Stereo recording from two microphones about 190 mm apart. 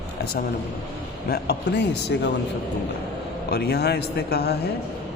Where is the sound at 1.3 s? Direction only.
60° left (ahead or behind).